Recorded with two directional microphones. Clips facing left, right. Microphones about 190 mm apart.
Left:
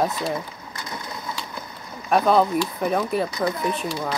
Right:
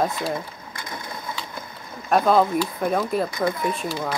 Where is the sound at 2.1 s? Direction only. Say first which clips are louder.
Even; centre (ahead or behind).